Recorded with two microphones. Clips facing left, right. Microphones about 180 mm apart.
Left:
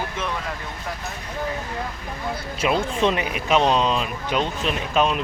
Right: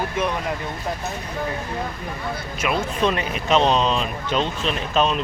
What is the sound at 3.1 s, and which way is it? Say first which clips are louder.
Speech: right 1 dB; 10° left (ahead or behind).